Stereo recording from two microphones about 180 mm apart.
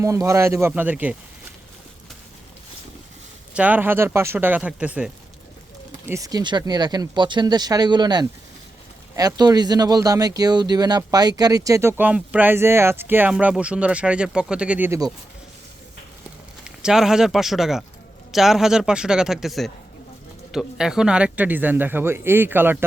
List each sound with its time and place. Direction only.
0.0 s speech: 15° right (ahead or behind)
3.5 s speech: 10° right (ahead or behind)
6.1 s speech: 20° right (ahead or behind)
16.6 s a man's voice: 5° right (ahead or behind)